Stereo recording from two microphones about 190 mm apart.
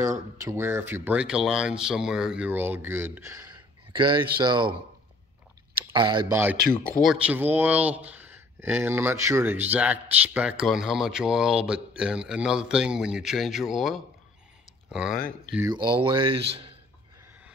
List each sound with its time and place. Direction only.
0.4 s speech: 15° right (ahead or behind)
3.9 s speech: 25° right (ahead or behind)
5.8 s a sound: 25° right (ahead or behind)
7.0 s speech: 5° right (ahead or behind)
15.7 s speech: 25° right (ahead or behind)